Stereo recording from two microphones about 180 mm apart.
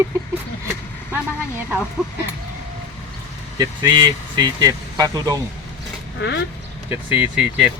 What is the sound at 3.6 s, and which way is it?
Speech, 25° right (ahead or behind).